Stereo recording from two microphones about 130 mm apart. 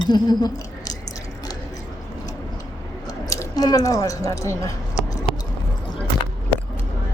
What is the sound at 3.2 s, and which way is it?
Speech, 25° left (ahead or behind).